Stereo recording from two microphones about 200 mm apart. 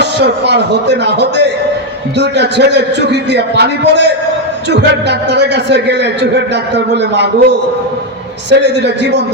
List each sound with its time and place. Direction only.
0.0 s a man's voice: 55° right (ahead or behind)
8.4 s a man's voice: 60° right (ahead or behind)